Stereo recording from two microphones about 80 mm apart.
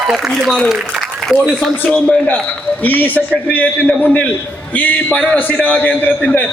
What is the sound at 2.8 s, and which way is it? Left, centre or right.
A man's voice, left.